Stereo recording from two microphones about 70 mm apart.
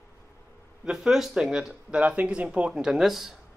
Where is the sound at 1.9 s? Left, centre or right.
Centre.